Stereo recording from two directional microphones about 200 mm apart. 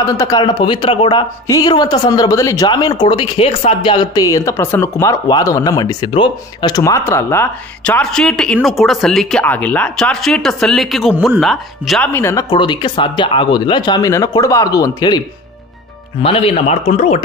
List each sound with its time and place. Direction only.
0.0 s a man's voice: 15° left (ahead or behind); by 17.2 s 35° left (ahead or behind)